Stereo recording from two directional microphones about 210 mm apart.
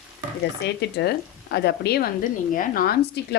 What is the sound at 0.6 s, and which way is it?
A woman's voice, 50° left (ahead or behind).